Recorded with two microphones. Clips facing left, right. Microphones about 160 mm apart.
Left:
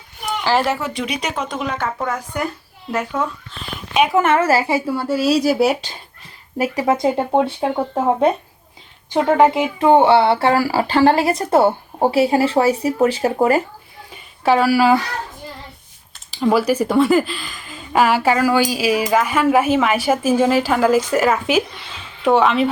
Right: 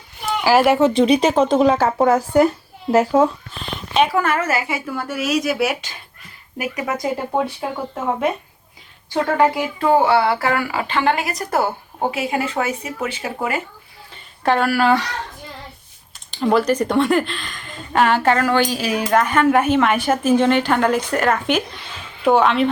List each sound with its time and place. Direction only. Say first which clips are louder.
0.3 s a sound: right 4 dB; 10° right (ahead or behind)
0.8 s speech: right 10 dB; 25° right (ahead or behind)
3.9 s speech: left 3 dB; 15° left (ahead or behind); by 8.3 s 30° left (ahead or behind)
9.1 s speech: left 3 dB; 20° left (ahead or behind); by 13.6 s 40° left (ahead or behind)
14.4 s speech: left 3 dB; 5° left (ahead or behind)
16.3 s speech: left 1 dB; 5° left (ahead or behind)